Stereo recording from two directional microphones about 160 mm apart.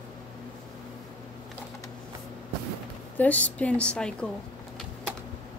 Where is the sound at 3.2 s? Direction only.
10° left (ahead or behind).